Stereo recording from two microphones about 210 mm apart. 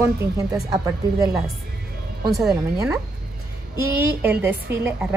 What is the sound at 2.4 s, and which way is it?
A woman's voice, centre (ahead or behind).